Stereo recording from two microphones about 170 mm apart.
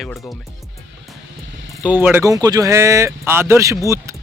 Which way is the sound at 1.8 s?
10° right (ahead or behind).